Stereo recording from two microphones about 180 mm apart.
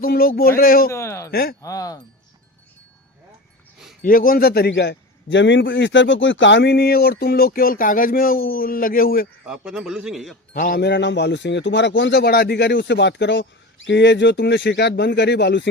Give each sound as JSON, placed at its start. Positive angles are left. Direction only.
{"t": 0.0, "sound": "speech", "side_deg": 55}
{"t": 0.9, "sound": "a sound", "side_deg": 15}
{"t": 1.3, "sound": "a man's voice", "side_deg": 55}
{"t": 1.6, "sound": "speech", "side_deg": 20}
{"t": 4.0, "sound": "a man's voice", "side_deg": 50}
{"t": 9.5, "sound": "a man's voice", "side_deg": -5}
{"t": 10.5, "sound": "speech", "side_deg": 50}